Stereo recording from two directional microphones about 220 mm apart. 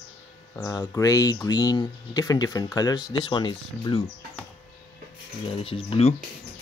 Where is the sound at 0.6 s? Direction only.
15° left (ahead or behind).